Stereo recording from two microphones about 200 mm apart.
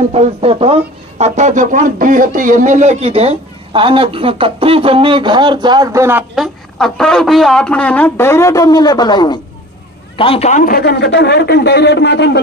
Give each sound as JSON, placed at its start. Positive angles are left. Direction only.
{"t": 0.1, "sound": "a man's voice", "side_deg": -30}